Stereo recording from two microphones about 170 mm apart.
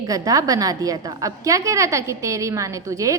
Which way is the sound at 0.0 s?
20° right (ahead or behind).